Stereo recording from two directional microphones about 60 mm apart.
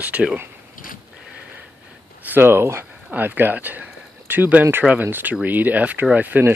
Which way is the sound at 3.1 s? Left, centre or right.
Right.